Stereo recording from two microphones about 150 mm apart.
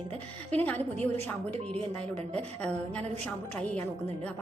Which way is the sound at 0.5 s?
10° left (ahead or behind).